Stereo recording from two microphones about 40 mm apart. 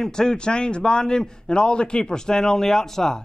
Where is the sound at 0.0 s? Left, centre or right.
Centre.